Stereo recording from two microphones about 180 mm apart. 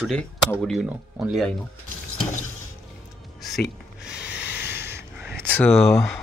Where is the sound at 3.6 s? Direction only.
70° left (ahead or behind).